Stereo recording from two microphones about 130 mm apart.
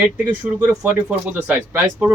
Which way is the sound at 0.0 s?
10° right (ahead or behind).